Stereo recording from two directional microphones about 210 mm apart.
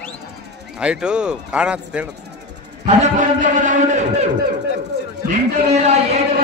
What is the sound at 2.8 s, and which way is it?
A man's voice, 35° right (ahead or behind).